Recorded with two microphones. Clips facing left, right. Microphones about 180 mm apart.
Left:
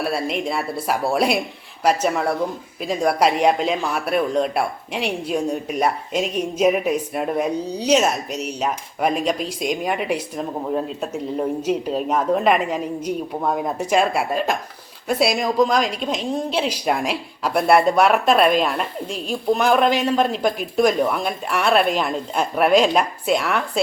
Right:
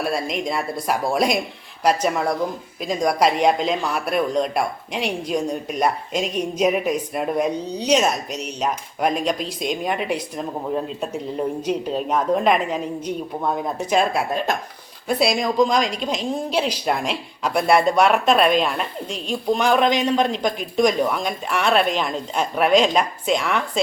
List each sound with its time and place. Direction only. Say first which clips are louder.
0.0 s speech: left 1 dB; 5° left (ahead or behind)